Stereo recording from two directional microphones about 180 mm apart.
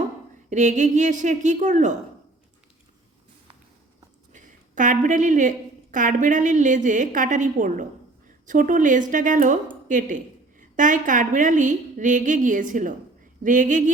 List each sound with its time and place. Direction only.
0.5 s a woman's voice: 40° right (ahead or behind)
4.3 s a woman's voice: 45° right (ahead or behind)